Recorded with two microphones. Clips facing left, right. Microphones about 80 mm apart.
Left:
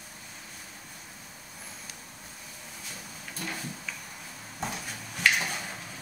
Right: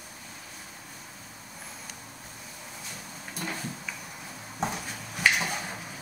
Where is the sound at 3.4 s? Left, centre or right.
Centre.